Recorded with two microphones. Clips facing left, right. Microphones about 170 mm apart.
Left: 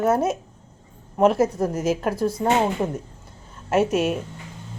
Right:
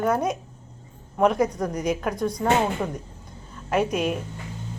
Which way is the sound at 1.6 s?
5° left (ahead or behind).